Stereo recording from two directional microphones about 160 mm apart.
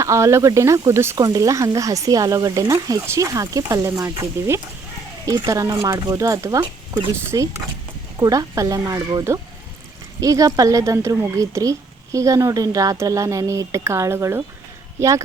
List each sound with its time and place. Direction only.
0.0 s speech: 15° right (ahead or behind)